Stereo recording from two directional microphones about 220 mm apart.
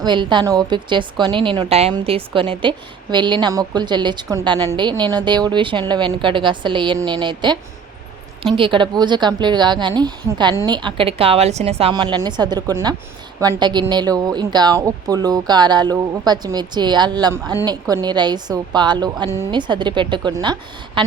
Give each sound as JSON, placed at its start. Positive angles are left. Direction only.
{"t": 0.0, "sound": "a woman's voice", "side_deg": -20}